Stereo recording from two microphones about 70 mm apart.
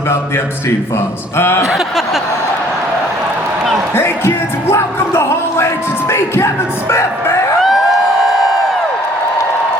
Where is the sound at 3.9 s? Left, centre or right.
Left.